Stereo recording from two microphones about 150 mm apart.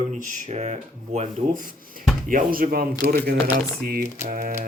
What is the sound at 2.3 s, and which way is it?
Speech, 70° right (ahead or behind).